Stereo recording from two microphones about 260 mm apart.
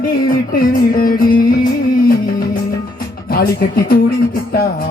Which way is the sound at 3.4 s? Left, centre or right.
Left.